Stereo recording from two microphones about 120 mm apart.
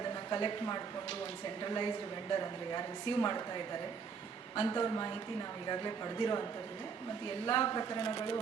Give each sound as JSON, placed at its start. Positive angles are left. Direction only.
{"t": 0.3, "sound": "speech", "side_deg": 35}
{"t": 7.4, "sound": "speech", "side_deg": 35}